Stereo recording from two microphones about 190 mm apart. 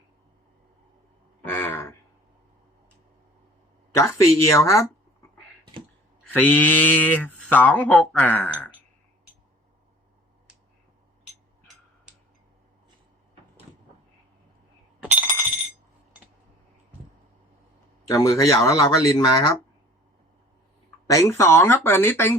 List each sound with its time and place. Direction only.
1.5 s a sound: 15° left (ahead or behind)
3.9 s speech: 15° left (ahead or behind)
6.3 s speech: 10° left (ahead or behind)
12.1 s tick-tock: 5° right (ahead or behind)
15.0 s a sound: 10° right (ahead or behind)
18.0 s speech: 15° left (ahead or behind)
21.1 s speech: 15° left (ahead or behind)